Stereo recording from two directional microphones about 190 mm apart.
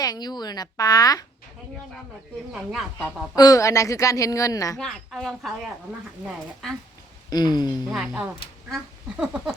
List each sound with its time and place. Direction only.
0.0 s a woman's voice: 20° left (ahead or behind)
2.5 s speech: centre (ahead or behind)
3.3 s a woman's voice: 20° left (ahead or behind)
4.8 s speech: centre (ahead or behind)
6.6 s speech: centre (ahead or behind)
7.3 s speech: 20° left (ahead or behind)
7.9 s speech: 5° right (ahead or behind)